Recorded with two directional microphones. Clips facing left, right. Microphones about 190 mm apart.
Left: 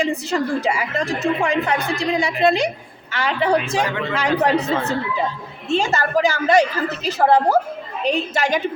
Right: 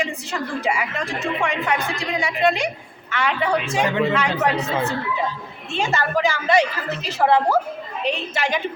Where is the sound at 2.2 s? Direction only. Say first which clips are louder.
Left 2 dB; 35° left (ahead or behind).